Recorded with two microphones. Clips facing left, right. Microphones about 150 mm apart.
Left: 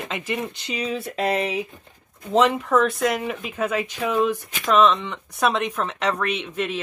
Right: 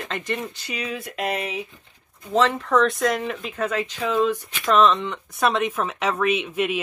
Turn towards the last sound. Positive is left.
turn(degrees=-10)  # may be behind; listen again after turning